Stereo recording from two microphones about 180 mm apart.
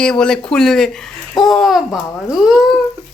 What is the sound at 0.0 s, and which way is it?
Speech, 5° left (ahead or behind).